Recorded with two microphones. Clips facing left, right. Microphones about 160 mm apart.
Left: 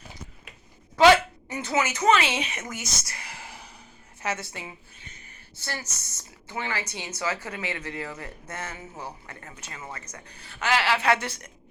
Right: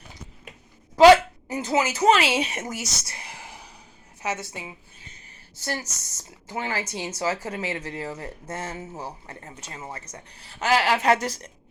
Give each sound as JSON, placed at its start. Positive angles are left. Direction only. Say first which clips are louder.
{"t": 0.9, "sound": "speech", "louder": "right 4 dB", "side_deg": -35}
{"t": 3.3, "sound": "a sound", "louder": "right 1 dB", "side_deg": -15}
{"t": 4.2, "sound": "a woman's voice", "louder": "right 1 dB", "side_deg": -15}
{"t": 5.5, "sound": "speech", "louder": "right 5 dB", "side_deg": -40}